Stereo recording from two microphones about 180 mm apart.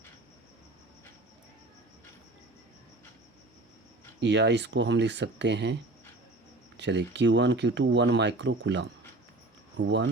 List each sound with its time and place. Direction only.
4.2 s speech: 75° right (ahead or behind)
6.7 s speech: 75° right (ahead or behind)